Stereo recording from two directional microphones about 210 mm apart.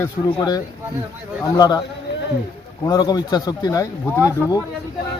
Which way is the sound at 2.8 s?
15° left (ahead or behind).